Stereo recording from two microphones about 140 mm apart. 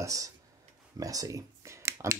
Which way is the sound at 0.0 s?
25° right (ahead or behind).